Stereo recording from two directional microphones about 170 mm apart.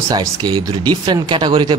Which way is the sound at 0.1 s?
25° right (ahead or behind).